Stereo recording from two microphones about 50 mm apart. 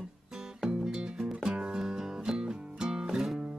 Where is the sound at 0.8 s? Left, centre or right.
Centre.